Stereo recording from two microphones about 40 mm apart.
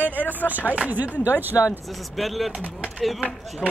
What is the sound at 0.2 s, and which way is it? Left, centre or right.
Speech, left.